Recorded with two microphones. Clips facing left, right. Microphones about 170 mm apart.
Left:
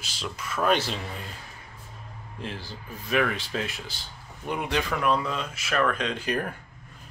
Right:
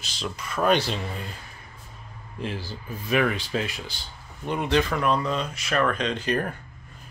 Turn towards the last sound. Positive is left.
turn(degrees=10)  # may be behind; listen again after turning